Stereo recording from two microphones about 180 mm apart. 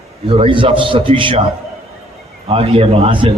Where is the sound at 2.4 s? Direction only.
30° right (ahead or behind).